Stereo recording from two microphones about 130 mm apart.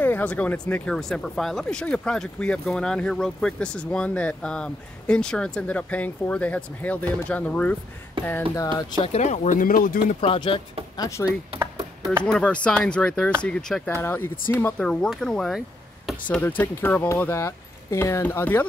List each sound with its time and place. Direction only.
0.0 s speech: 10° left (ahead or behind)
0.9 s speech: 5° left (ahead or behind)
8.2 s speech: 40° right (ahead or behind)
9.0 s speech: 60° left (ahead or behind); by 10.1 s 90° left
10.2 s speech: 45° left (ahead or behind)
11.0 s speech: 25° left (ahead or behind)
11.8 s a sound: 20° right (ahead or behind)
12.3 s speech: 5° left (ahead or behind)
13.8 s speech: 15° left (ahead or behind)